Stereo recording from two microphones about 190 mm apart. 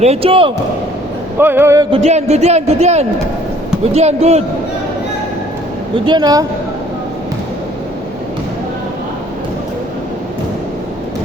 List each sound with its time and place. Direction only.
0.0 s speech: 30° right (ahead or behind)
1.4 s music: 10° right (ahead or behind)
1.9 s a man's voice: 35° right (ahead or behind)
6.1 s speech: 20° right (ahead or behind)